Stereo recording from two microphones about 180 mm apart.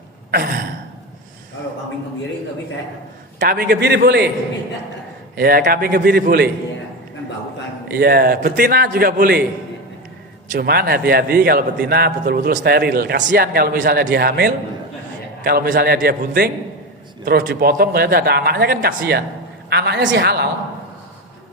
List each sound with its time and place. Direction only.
0.3 s sigh: 55° right (ahead or behind)
3.3 s a man's voice: 55° right (ahead or behind)
5.4 s a man's voice: 55° right (ahead or behind)
7.9 s a man's voice: 60° right (ahead or behind)
10.5 s a man's voice: 55° right (ahead or behind)